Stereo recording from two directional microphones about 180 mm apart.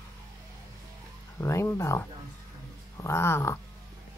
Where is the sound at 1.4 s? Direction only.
15° left (ahead or behind).